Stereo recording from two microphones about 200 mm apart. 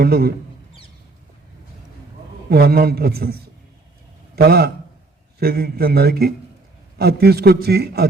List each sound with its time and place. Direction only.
0.0 s a man's voice: 50° right (ahead or behind)
2.5 s a man's voice: 50° right (ahead or behind)
4.4 s a man's voice: 50° right (ahead or behind)